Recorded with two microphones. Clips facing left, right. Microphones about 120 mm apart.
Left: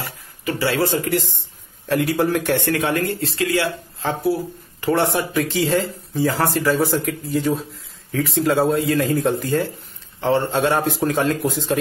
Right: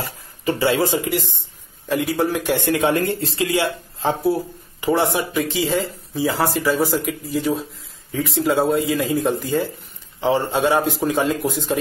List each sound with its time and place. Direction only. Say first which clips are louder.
0.6 s speech: right 1 dB; 15° right (ahead or behind)
1.9 s speech: left 1 dB; centre (ahead or behind)
2.6 s speech: right 2 dB; 20° right (ahead or behind)
4.9 s speech: even; centre (ahead or behind)